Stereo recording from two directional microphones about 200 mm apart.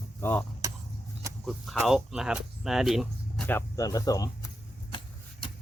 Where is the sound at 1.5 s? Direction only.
Centre (ahead or behind).